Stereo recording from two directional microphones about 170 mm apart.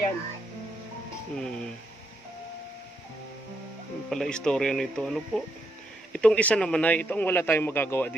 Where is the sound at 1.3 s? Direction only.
5° left (ahead or behind).